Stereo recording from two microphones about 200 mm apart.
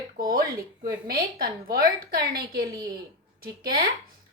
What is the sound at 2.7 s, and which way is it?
Speech, 20° right (ahead or behind).